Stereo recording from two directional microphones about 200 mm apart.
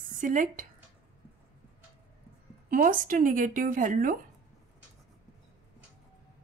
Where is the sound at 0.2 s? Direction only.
40° right (ahead or behind).